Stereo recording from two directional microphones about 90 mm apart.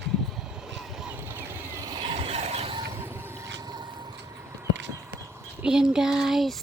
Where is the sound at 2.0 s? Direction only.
90° right.